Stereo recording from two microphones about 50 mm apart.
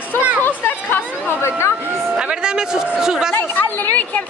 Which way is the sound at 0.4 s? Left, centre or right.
Left.